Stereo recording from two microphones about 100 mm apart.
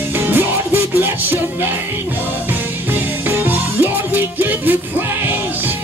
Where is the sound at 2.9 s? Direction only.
20° right (ahead or behind).